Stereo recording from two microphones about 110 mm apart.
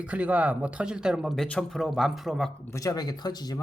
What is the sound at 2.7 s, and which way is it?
Speech, 30° left (ahead or behind).